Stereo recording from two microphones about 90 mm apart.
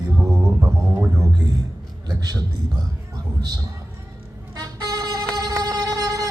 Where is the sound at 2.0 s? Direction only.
45° right (ahead or behind).